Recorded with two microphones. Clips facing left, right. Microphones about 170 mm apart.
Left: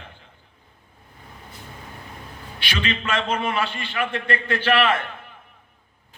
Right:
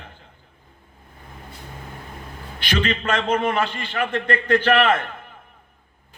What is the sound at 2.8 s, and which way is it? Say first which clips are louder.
A man's voice: right 2 dB; 50° right (ahead or behind).